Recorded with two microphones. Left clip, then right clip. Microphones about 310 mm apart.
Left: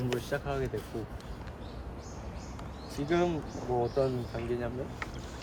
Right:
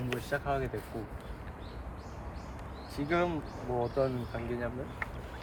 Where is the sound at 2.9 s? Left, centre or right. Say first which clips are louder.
Left 1 dB; centre.